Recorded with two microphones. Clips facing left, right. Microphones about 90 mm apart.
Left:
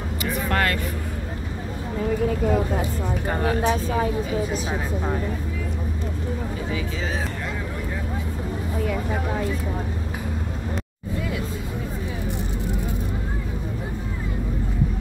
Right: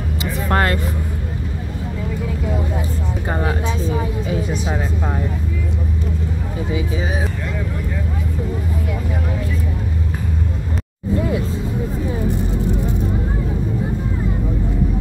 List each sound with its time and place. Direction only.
0.2 s vehicle: 30° right (ahead or behind)
3.9 s a woman's voice: 40° left (ahead or behind)